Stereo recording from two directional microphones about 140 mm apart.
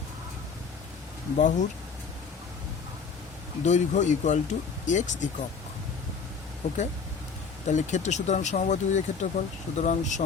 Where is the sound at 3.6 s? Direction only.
60° left (ahead or behind).